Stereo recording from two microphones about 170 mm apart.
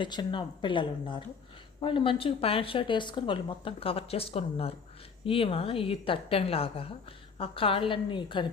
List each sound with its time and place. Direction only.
0.0 s speech: 25° left (ahead or behind)